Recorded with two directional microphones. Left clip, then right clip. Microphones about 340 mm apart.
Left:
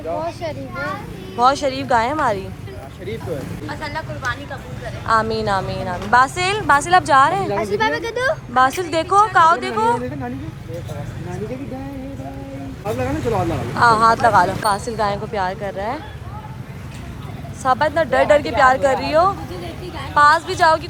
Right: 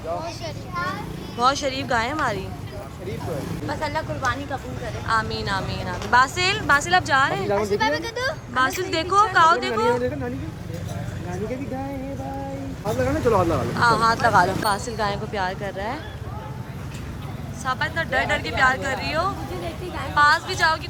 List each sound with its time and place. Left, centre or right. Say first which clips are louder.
1.4 s speech: left 5 dB; centre
3.7 s speech: right 1 dB; right
5.0 s speech: left 6 dB; centre
7.6 s speech: left 3 dB; left
8.5 s speech: left 5 dB; centre
13.3 s speech: even; centre
17.6 s speech: left 8 dB; centre